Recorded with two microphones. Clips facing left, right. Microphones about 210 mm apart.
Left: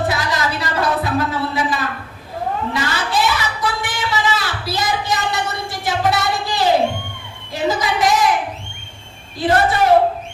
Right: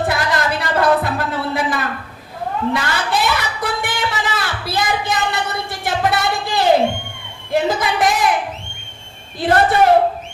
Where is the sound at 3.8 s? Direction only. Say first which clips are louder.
Left 1 dB; 55° right (ahead or behind).